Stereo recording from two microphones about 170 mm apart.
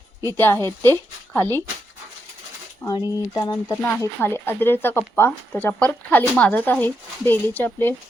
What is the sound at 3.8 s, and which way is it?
Speech, 10° left (ahead or behind).